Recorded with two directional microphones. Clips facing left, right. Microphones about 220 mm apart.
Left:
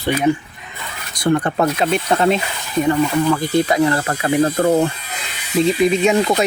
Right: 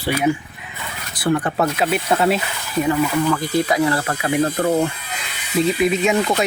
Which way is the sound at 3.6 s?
Centre (ahead or behind).